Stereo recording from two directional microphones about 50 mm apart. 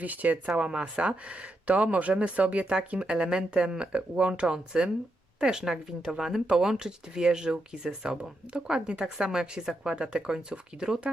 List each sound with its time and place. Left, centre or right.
0.0 s speech: right; by 11.1 s centre